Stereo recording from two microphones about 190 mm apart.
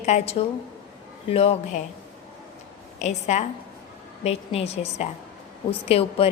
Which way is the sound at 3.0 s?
40° left (ahead or behind).